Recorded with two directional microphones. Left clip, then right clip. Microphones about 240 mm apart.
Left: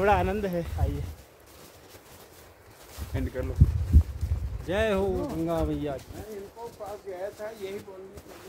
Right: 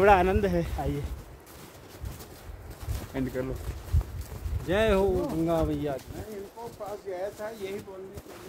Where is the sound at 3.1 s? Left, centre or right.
Left.